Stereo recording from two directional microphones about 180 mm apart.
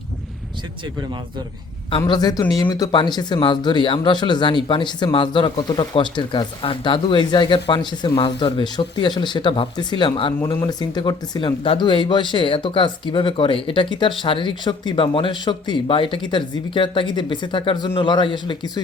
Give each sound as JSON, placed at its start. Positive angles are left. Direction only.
{"t": 2.0, "sound": "speech", "side_deg": 20}